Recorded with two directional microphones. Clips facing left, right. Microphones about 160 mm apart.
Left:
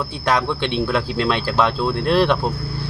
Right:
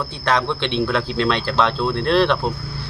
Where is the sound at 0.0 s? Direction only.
10° left (ahead or behind).